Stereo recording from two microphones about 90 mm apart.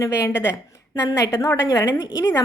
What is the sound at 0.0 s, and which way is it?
A woman's voice, 35° left (ahead or behind).